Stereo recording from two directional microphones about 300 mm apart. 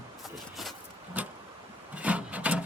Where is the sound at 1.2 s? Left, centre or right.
Centre.